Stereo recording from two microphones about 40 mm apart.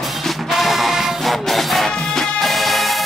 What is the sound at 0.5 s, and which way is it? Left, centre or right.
Music, centre.